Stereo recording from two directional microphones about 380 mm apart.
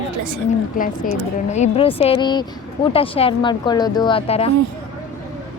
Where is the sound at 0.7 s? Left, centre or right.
Left.